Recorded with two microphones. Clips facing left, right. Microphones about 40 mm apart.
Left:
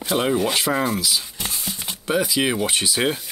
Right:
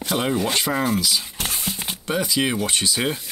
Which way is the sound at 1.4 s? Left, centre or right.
Right.